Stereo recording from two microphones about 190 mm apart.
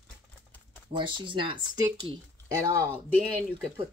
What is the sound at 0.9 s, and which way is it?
Speech, 25° right (ahead or behind).